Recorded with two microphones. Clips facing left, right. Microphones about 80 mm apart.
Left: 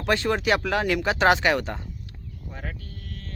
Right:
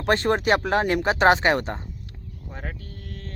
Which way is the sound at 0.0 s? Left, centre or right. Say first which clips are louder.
Right 2 dB; right.